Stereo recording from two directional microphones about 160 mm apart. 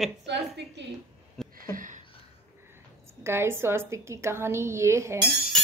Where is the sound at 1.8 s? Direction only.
55° right (ahead or behind).